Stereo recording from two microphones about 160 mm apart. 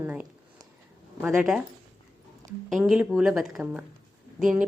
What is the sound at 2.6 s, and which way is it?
Speech, centre (ahead or behind).